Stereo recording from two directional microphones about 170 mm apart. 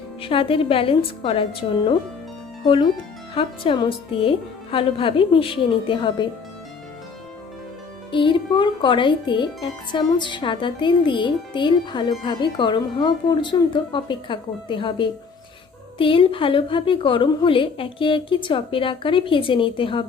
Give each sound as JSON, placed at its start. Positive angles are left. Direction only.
{"t": 0.2, "sound": "a woman's voice", "side_deg": 30}
{"t": 8.1, "sound": "a woman's voice", "side_deg": 30}